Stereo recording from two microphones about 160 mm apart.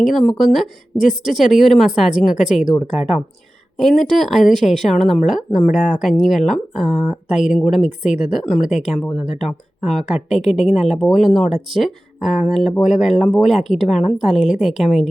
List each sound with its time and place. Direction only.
0.0 s a woman's voice: centre (ahead or behind)
1.3 s speech: 50° left (ahead or behind)
1.5 s a woman's voice: centre (ahead or behind)
3.8 s a woman's voice: centre (ahead or behind)
5.6 s speech: 55° left (ahead or behind)
6.0 s a woman's voice: centre (ahead or behind)
9.2 s speech: 50° left (ahead or behind)
9.5 s a woman's voice: centre (ahead or behind)